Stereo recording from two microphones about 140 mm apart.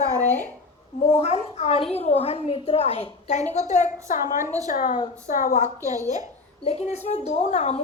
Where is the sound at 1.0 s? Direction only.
50° left (ahead or behind); by 5.7 s 70° left (ahead or behind).